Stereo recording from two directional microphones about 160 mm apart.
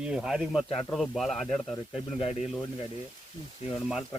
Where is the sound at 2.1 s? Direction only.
40° left (ahead or behind).